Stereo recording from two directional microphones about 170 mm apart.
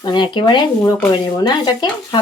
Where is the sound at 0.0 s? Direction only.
25° left (ahead or behind).